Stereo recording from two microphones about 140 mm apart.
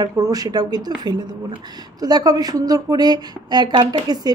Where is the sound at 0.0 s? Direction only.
25° right (ahead or behind).